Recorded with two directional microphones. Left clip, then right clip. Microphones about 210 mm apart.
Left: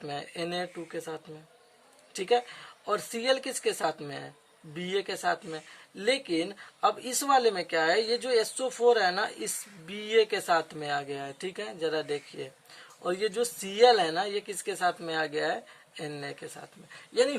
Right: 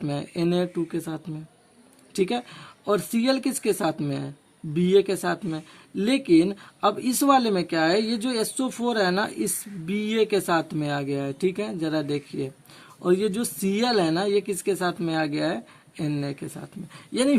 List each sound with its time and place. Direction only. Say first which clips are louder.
0.0 s speech: right 7 dB; 20° right (ahead or behind)